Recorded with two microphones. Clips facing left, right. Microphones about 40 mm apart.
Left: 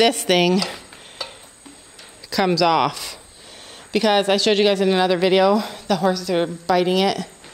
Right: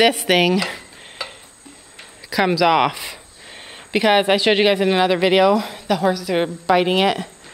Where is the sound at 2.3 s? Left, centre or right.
Centre.